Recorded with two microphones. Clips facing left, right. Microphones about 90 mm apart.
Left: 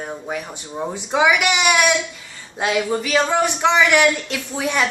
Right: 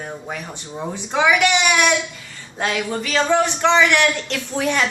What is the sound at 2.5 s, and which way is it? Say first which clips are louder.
A man's voice: left 3 dB; 10° left (ahead or behind).